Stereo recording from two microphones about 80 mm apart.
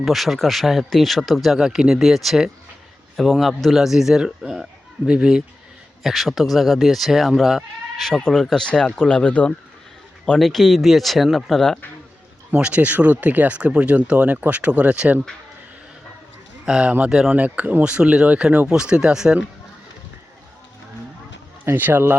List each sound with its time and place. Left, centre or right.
0.0 s speech: centre
10.3 s speech: centre
12.5 s speech: centre
16.6 s speech: centre
21.6 s speech: right